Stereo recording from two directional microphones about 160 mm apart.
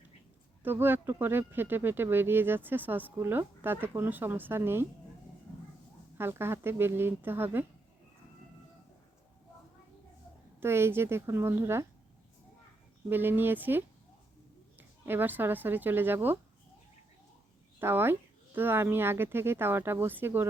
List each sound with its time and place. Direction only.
0.6 s speech: 15° right (ahead or behind)
6.1 s speech: 15° right (ahead or behind)
10.6 s speech: 15° right (ahead or behind)
13.1 s speech: 15° right (ahead or behind)
17.7 s speech: 15° right (ahead or behind)